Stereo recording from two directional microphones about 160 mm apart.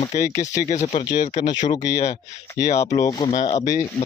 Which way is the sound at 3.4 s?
45° left (ahead or behind).